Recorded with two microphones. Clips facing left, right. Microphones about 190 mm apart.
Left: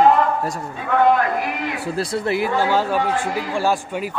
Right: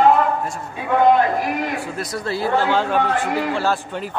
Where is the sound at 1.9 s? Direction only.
30° left (ahead or behind).